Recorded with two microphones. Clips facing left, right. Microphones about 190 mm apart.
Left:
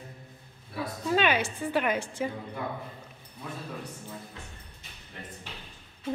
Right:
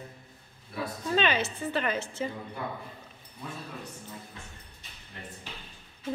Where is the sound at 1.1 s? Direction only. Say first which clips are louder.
Left 2 dB; 10° left (ahead or behind).